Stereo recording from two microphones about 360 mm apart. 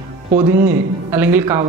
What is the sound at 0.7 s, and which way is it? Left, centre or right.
Speech, centre.